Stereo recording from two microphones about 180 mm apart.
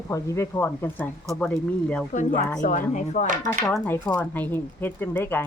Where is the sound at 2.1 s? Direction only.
40° left (ahead or behind).